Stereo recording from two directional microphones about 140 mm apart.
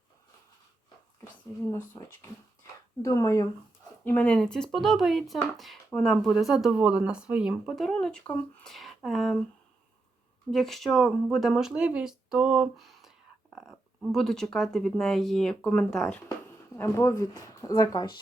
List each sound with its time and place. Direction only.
2.2 s speech: 20° left (ahead or behind)
4.0 s speech: 10° left (ahead or behind)
10.5 s speech: centre (ahead or behind)
16.7 s speech: 20° left (ahead or behind)